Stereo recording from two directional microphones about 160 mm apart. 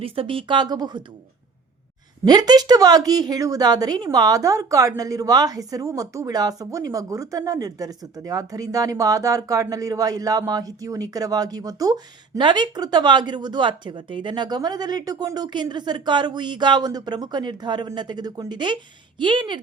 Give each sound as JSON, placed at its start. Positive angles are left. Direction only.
{"t": 0.0, "sound": "a woman's voice", "side_deg": -35}
{"t": 2.2, "sound": "a woman's voice", "side_deg": -25}